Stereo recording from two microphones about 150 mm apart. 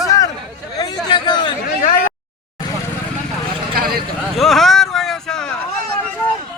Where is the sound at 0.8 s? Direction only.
30° left (ahead or behind).